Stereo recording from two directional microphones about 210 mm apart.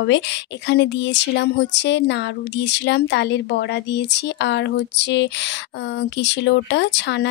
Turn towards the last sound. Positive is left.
turn(degrees=55)  # may be behind; listen again after turning